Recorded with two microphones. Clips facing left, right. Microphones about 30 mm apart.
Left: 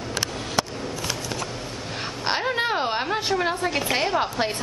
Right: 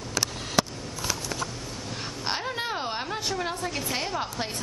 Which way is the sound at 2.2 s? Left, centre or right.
Left.